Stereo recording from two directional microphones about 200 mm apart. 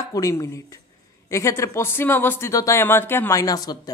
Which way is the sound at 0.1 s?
15° left (ahead or behind).